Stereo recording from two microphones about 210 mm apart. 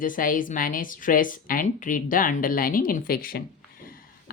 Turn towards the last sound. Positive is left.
turn(degrees=45)  # may be behind; listen again after turning